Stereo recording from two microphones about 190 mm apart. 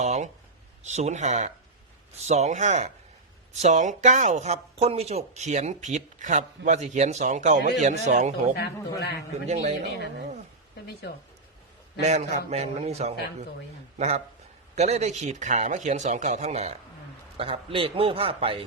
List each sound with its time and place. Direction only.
0.0 s a sound: 35° right (ahead or behind)
0.9 s speech: 35° right (ahead or behind)
9.0 s a man's voice: 60° left (ahead or behind)
9.5 s speech: 35° right (ahead or behind)
11.9 s speech: 35° right (ahead or behind)
14.8 s a man's voice: 35° right (ahead or behind)